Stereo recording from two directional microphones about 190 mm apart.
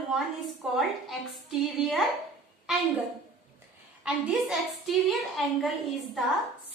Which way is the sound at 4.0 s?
Centre (ahead or behind).